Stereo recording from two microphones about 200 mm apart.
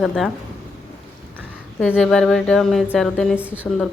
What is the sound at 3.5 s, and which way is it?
Speech, 10° left (ahead or behind).